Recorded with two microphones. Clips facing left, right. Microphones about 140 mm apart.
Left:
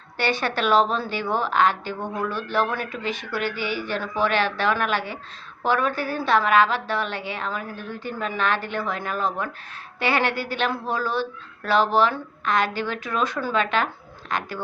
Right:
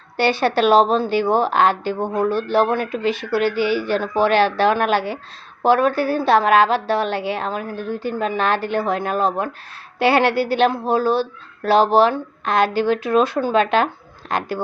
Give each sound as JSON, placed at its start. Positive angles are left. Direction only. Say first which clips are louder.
{"t": 0.2, "sound": "a woman's voice", "louder": "right 7 dB", "side_deg": -30}